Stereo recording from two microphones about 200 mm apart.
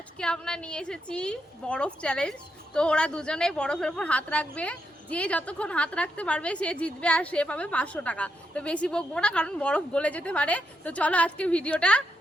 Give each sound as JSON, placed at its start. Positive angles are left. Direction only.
{"t": 0.2, "sound": "a woman's voice", "side_deg": 5}